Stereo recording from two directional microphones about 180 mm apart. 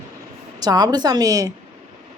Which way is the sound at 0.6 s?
20° right (ahead or behind).